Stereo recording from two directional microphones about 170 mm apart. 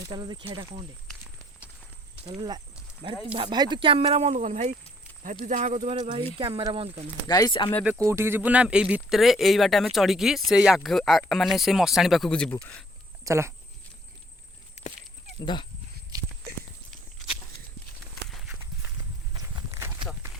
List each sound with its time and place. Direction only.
0.1 s speech: 25° right (ahead or behind)
2.2 s speech: 25° right (ahead or behind)
7.3 s speech: 25° left (ahead or behind)
7.9 s speech: 15° right (ahead or behind); by 12.8 s 10° left (ahead or behind)
13.2 s speech: 15° right (ahead or behind)
14.8 s horse: 40° left (ahead or behind)
15.4 s speech: 25° left (ahead or behind)
16.1 s walk: 20° right (ahead or behind)
18.3 s horse: centre (ahead or behind)
19.4 s walk: 20° right (ahead or behind)